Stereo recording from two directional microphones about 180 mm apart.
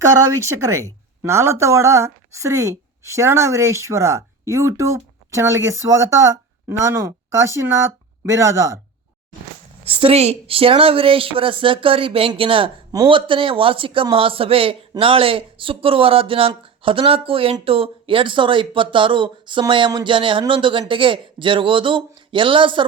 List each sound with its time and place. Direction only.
0.3 s a woman's voice: 15° right (ahead or behind)
9.8 s speech: 30° right (ahead or behind)